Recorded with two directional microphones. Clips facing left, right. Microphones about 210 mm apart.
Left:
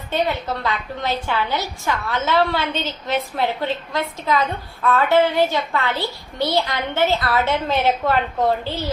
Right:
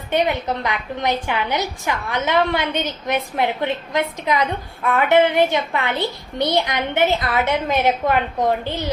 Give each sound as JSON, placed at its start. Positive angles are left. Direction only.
{"t": 0.1, "sound": "a woman's voice", "side_deg": -15}